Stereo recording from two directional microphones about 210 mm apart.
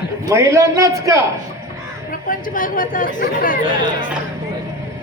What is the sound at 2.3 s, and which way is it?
Speech, 40° left (ahead or behind).